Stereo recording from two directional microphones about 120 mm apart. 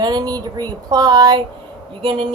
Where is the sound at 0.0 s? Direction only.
35° right (ahead or behind).